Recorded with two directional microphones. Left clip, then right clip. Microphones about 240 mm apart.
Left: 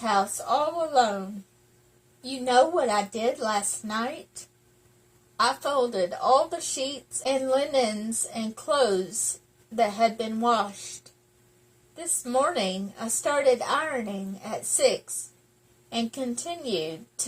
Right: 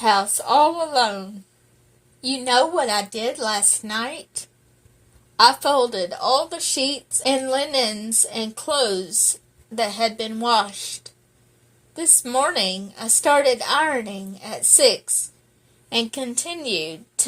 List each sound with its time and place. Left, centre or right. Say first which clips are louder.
0.0 s a woman's voice: right 6 dB; right
5.4 s a woman's voice: right 8 dB; right
11.9 s a woman's voice: right 5 dB; right
15.9 s a woman's voice: right 6 dB; right